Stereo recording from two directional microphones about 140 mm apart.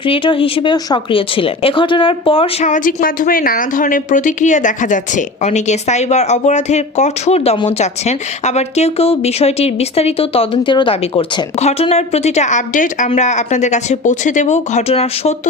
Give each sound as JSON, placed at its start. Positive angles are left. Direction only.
{"t": 0.0, "sound": "speech", "side_deg": 40}
{"t": 2.6, "sound": "a woman's voice", "side_deg": 70}